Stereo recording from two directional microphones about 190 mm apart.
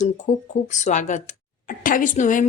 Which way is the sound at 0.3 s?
35° left (ahead or behind).